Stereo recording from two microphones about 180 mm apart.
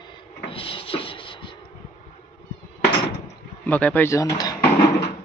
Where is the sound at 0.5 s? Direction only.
30° left (ahead or behind).